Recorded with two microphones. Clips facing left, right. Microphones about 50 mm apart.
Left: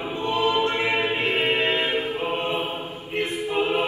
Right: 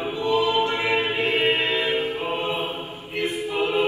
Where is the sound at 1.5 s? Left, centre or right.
Left.